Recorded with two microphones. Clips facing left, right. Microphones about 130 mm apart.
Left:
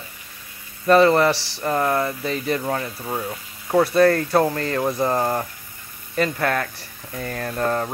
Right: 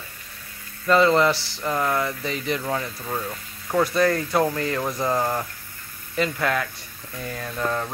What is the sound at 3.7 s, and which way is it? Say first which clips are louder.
Speech: left 4 dB; 30° left (ahead or behind).